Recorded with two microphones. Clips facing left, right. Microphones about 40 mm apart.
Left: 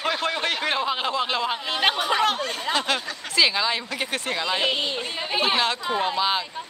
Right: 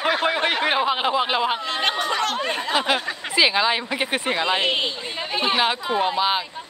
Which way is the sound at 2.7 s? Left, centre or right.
Centre.